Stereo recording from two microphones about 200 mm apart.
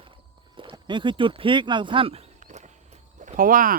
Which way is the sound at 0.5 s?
25° right (ahead or behind).